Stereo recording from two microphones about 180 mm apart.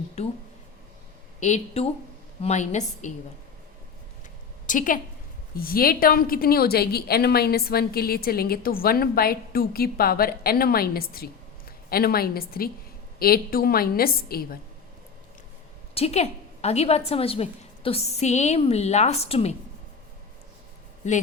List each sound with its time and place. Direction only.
1.4 s a woman's voice: 40° left (ahead or behind)
4.6 s a woman's voice: 45° left (ahead or behind)
16.0 s a woman's voice: 35° left (ahead or behind)